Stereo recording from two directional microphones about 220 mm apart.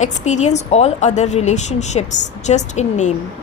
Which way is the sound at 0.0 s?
30° left (ahead or behind).